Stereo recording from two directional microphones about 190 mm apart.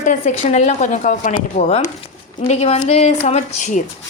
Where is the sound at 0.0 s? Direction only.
40° left (ahead or behind).